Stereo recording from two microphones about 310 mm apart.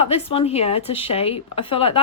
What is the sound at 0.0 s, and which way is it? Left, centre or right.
Speech, centre.